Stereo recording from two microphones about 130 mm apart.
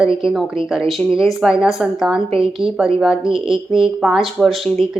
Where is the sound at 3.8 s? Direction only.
5° right (ahead or behind).